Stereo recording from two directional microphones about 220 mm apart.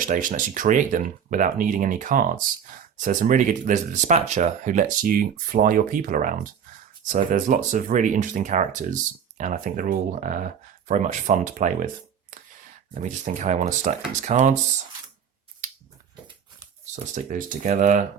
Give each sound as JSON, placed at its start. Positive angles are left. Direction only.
{"t": 0.0, "sound": "speech", "side_deg": -35}
{"t": 12.9, "sound": "speech", "side_deg": -35}
{"t": 16.9, "sound": "speech", "side_deg": -35}